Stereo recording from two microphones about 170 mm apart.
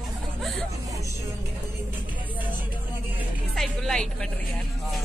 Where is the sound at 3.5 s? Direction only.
5° left (ahead or behind).